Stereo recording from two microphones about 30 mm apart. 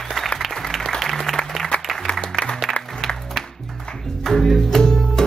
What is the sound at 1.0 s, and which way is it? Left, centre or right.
Applause, centre.